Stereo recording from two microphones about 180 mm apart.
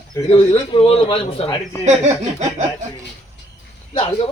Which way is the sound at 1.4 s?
15° left (ahead or behind).